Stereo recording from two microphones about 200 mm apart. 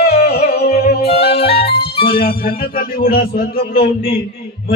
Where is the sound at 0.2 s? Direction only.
50° left (ahead or behind).